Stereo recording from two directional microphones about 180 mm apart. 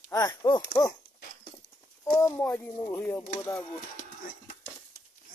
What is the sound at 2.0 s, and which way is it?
Speech, 15° left (ahead or behind).